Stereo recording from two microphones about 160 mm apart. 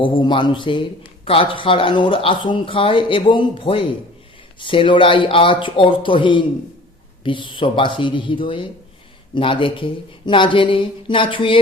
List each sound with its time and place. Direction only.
0.0 s speech: 30° left (ahead or behind)